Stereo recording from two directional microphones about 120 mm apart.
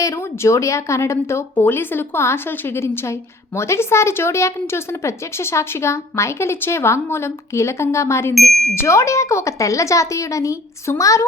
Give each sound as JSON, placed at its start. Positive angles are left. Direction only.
{"t": 0.0, "sound": "speech", "side_deg": 25}